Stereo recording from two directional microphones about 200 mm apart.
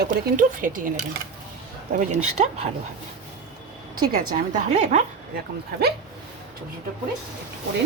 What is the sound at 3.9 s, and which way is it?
Speech, 20° right (ahead or behind).